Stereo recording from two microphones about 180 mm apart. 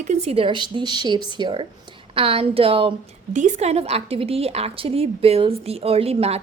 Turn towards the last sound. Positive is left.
turn(degrees=-35)  # may be behind; listen again after turning